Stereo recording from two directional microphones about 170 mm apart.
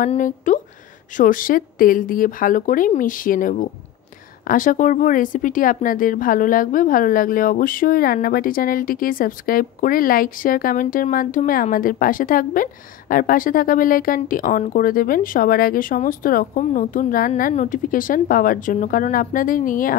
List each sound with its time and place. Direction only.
0.0 s speech: 50° left (ahead or behind)